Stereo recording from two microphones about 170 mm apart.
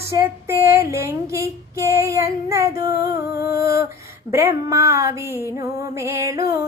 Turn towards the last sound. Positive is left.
turn(degrees=-20)  # may be behind; listen again after turning